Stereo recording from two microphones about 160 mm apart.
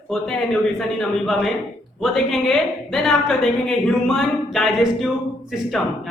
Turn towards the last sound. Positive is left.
turn(degrees=0)  # may be behind; listen again after turning